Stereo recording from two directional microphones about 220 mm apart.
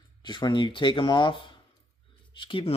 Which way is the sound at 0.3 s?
20° left (ahead or behind).